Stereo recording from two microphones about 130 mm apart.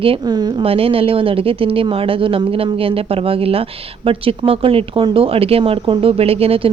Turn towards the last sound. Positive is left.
turn(degrees=-50)  # may be behind; listen again after turning